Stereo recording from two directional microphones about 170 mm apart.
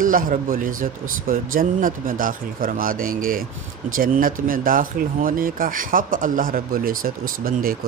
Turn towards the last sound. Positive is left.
turn(degrees=-55)  # may be behind; listen again after turning